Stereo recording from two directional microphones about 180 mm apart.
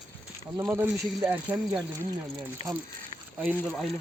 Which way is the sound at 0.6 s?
10° right (ahead or behind).